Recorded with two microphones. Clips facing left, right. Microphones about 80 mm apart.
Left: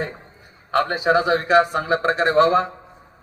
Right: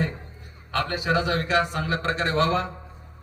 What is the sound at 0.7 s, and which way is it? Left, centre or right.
A man's voice, left.